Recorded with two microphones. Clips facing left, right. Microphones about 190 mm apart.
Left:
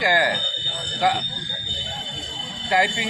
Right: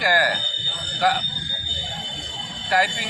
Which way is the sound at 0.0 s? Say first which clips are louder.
Left 1 dB; 20° left (ahead or behind).